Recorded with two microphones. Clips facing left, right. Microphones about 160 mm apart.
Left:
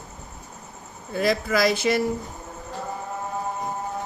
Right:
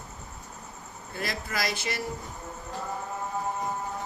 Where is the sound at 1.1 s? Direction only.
90° left.